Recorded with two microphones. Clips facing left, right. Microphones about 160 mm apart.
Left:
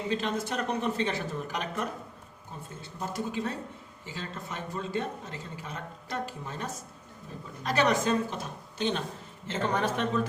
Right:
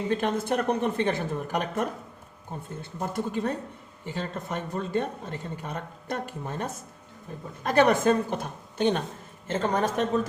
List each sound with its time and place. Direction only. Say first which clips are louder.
0.1 s speech: right 5 dB; 55° right (ahead or behind)
3.0 s speech: right 4 dB; 55° right (ahead or behind)